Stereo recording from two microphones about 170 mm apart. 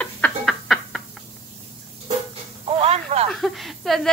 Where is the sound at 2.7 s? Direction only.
35° right (ahead or behind).